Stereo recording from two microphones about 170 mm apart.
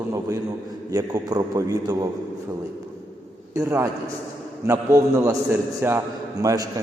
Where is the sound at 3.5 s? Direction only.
15° right (ahead or behind).